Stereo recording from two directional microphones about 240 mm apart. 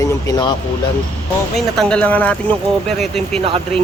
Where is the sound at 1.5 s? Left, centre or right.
Centre.